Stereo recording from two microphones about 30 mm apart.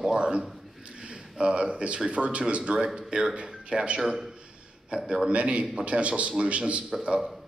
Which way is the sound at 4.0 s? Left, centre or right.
Centre.